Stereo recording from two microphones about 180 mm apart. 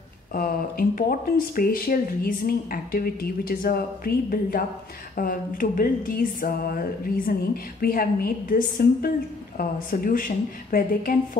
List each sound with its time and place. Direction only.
0.3 s speech: 50° left (ahead or behind)